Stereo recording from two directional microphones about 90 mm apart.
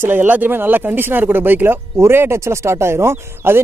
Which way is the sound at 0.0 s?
20° right (ahead or behind).